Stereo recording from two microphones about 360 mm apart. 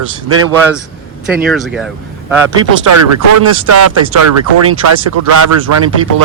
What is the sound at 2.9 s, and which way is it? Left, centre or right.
Speech, right.